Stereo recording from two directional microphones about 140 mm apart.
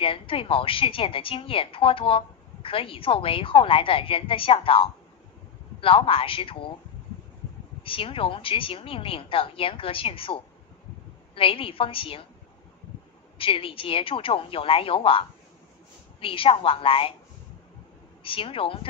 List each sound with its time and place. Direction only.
0.0 s a woman's voice: 40° left (ahead or behind)
7.8 s a woman's voice: 40° left (ahead or behind)
13.4 s a woman's voice: 40° left (ahead or behind)
18.2 s a woman's voice: 40° left (ahead or behind)